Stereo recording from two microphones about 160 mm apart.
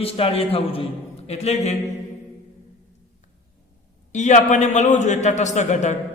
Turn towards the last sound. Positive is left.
turn(degrees=45)  # may be behind; listen again after turning